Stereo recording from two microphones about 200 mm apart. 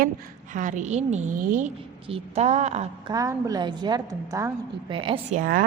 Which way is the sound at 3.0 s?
15° right (ahead or behind).